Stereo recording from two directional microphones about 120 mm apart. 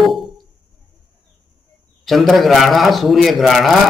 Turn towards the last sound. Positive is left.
turn(degrees=0)  # may be behind; listen again after turning